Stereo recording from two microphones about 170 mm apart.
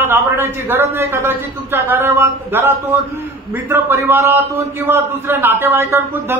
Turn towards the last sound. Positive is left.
turn(degrees=-15)  # may be behind; listen again after turning